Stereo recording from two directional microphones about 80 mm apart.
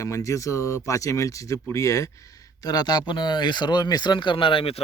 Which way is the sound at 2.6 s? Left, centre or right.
Left.